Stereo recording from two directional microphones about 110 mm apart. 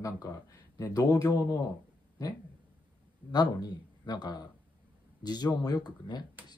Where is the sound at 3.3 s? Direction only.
40° left (ahead or behind).